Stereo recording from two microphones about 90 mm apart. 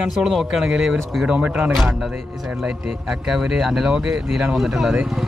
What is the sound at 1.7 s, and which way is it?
Speech, centre (ahead or behind).